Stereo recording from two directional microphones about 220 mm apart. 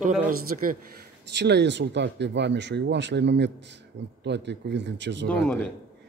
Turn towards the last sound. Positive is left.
turn(degrees=5)  # may be behind; listen again after turning